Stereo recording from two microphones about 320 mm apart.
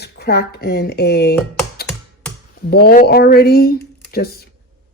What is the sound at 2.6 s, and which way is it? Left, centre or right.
Speech, left.